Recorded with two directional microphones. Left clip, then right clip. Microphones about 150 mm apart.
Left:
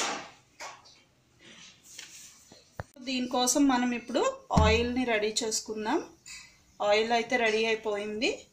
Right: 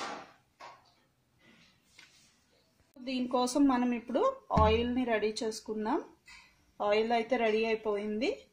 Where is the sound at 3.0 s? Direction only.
45° right (ahead or behind).